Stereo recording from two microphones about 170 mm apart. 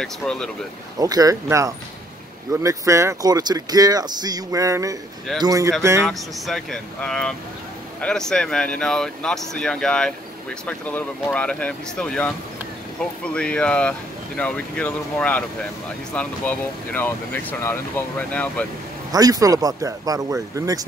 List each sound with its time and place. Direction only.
0.0 s speech: 5° left (ahead or behind)
0.9 s speech: 20° right (ahead or behind)
6.0 s speech: centre (ahead or behind)
19.1 s speech: 20° right (ahead or behind)